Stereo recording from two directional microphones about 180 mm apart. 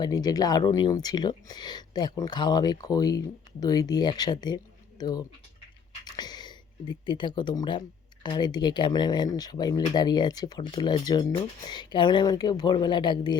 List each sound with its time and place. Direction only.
0.0 s speech: 20° left (ahead or behind)